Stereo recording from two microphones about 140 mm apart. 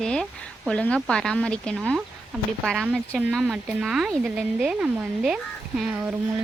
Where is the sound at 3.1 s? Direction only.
5° right (ahead or behind).